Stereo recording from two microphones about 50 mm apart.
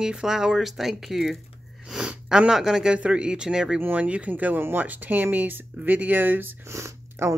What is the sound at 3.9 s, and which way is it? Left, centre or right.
Speech, right.